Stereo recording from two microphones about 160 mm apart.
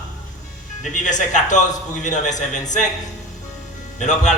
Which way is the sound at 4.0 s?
50° left (ahead or behind).